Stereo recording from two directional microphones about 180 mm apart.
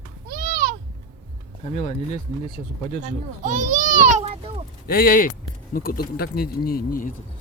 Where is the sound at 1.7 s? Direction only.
40° left (ahead or behind).